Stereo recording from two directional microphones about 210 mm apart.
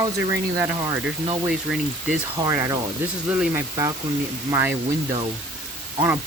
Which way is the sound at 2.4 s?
15° right (ahead or behind).